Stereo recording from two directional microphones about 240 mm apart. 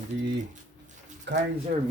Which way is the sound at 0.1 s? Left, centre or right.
Right.